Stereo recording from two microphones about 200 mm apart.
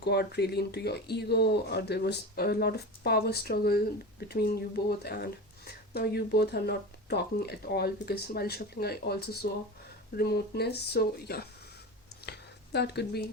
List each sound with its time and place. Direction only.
0.0 s speech: 55° left (ahead or behind)
12.7 s speech: 55° left (ahead or behind)